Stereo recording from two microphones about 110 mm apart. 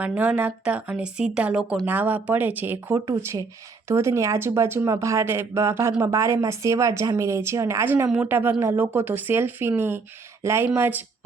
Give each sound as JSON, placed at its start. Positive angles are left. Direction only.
{"t": 0.0, "sound": "speech", "side_deg": -15}
{"t": 2.9, "sound": "a woman's voice", "side_deg": -30}